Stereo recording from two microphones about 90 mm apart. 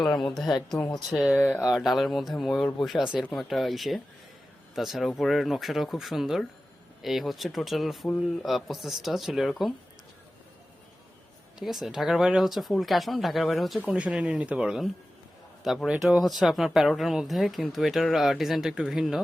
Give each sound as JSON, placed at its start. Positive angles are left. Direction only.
{"t": 0.0, "sound": "speech", "side_deg": 5}
{"t": 1.4, "sound": "speech", "side_deg": 25}
{"t": 1.7, "sound": "speech", "side_deg": 0}
{"t": 11.6, "sound": "speech", "side_deg": 0}
{"t": 13.8, "sound": "speech", "side_deg": -10}